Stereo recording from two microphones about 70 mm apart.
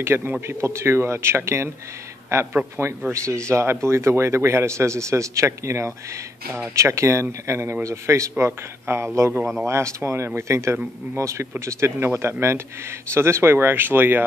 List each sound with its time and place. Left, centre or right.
0.0 s a man's voice: right